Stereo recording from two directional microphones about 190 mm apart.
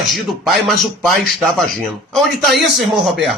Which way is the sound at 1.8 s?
Centre (ahead or behind).